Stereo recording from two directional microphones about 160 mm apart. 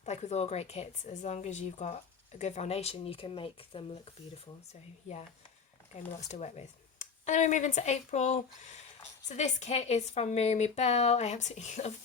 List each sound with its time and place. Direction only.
0.0 s speech: 45° left (ahead or behind)